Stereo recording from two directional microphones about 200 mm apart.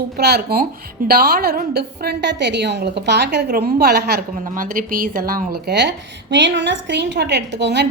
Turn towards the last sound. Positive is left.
turn(degrees=-60)  # may be behind; listen again after turning